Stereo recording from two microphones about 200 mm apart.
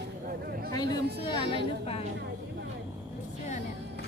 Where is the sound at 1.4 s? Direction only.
30° left (ahead or behind).